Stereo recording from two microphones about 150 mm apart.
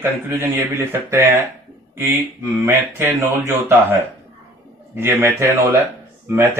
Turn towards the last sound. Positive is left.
turn(degrees=-15)  # may be behind; listen again after turning